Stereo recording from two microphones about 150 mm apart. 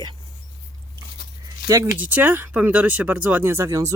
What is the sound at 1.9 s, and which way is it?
Speech, 10° right (ahead or behind).